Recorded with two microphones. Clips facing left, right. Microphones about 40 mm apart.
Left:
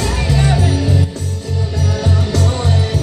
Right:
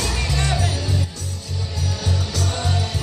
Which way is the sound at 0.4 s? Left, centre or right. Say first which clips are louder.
Left 7 dB; centre.